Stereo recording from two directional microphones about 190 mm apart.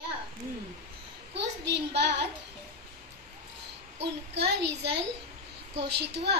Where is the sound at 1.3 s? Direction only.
65° right (ahead or behind).